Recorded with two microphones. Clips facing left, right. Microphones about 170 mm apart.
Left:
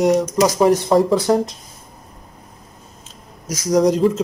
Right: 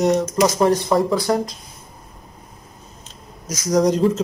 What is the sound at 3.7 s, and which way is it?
Speech, 5° left (ahead or behind).